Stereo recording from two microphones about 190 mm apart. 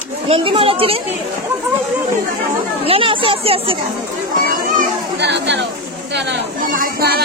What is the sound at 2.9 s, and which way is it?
Speech, 30° right (ahead or behind).